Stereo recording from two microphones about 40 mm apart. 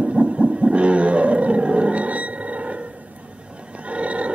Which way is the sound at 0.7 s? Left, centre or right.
Right.